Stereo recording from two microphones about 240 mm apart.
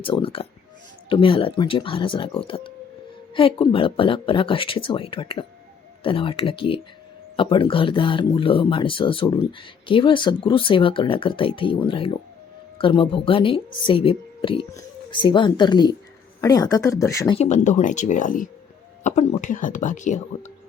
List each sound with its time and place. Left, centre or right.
0.0 s speech: left
17.3 s speech: left